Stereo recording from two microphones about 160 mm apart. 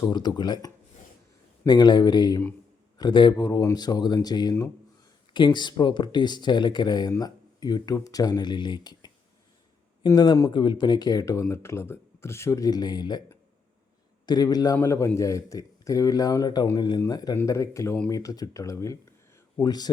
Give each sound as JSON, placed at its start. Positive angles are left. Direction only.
{"t": 0.0, "sound": "speech", "side_deg": 25}
{"t": 14.3, "sound": "speech", "side_deg": 25}